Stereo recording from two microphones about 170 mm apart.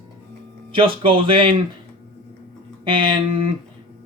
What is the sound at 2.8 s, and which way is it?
Speech, 30° right (ahead or behind).